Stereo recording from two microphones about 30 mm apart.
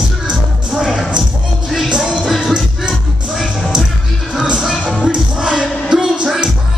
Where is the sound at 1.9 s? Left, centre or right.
Right.